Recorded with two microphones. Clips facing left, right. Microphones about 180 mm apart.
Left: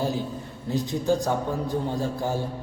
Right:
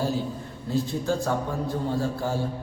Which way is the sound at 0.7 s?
15° left (ahead or behind).